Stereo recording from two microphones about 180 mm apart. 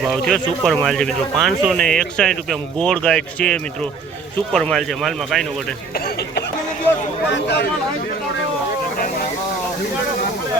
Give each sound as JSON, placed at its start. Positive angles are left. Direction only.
{"t": 0.0, "sound": "speech", "side_deg": 0}
{"t": 5.9, "sound": "speech", "side_deg": 60}
{"t": 7.3, "sound": "speech", "side_deg": 80}